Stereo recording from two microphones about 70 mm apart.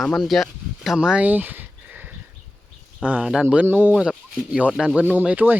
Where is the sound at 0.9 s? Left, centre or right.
Centre.